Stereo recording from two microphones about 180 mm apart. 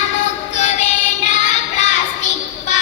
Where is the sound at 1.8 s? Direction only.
40° left (ahead or behind).